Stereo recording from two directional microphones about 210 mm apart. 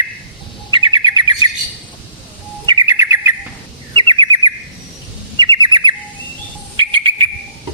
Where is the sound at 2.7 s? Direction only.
15° right (ahead or behind).